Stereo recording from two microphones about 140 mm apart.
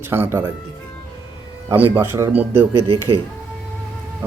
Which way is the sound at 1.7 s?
15° right (ahead or behind).